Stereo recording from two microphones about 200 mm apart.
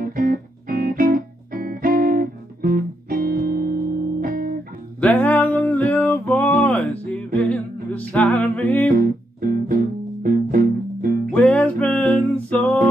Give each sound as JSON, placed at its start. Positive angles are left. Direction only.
{"t": 0.0, "sound": "music", "side_deg": -45}
{"t": 5.0, "sound": "a sound", "side_deg": 5}
{"t": 7.4, "sound": "music", "side_deg": 5}
{"t": 8.9, "sound": "music", "side_deg": -45}
{"t": 11.3, "sound": "music", "side_deg": 5}